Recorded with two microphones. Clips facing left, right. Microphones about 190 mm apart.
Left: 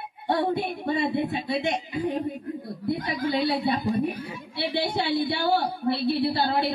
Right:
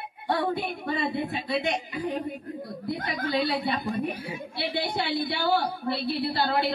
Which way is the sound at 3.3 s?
25° left (ahead or behind).